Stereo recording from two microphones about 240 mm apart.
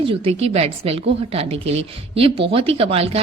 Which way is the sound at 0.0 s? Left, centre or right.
Right.